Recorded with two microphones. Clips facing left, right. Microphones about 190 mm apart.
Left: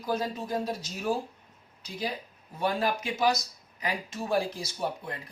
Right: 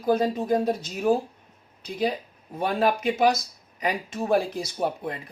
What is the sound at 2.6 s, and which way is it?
Speech, 60° right (ahead or behind).